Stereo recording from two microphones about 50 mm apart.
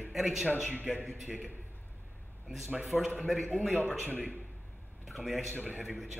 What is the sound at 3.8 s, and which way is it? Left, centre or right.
Speech, left.